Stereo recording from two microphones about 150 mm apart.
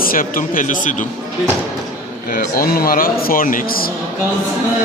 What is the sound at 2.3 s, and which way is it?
Speech, 75° left (ahead or behind).